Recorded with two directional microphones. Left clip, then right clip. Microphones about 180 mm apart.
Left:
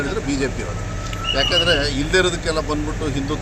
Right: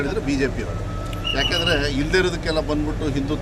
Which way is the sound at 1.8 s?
35° right (ahead or behind).